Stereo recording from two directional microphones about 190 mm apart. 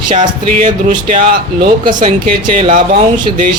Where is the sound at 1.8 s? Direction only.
25° right (ahead or behind).